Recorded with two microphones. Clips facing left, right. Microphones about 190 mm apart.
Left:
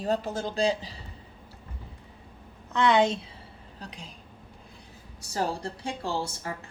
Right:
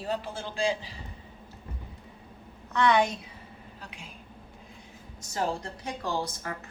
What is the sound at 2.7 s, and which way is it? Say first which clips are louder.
Speech: left 2 dB; 20° left (ahead or behind).